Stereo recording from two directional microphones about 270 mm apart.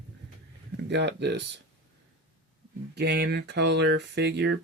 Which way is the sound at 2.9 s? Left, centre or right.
Right.